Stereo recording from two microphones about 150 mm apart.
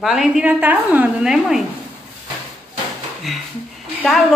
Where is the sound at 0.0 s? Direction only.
Centre (ahead or behind).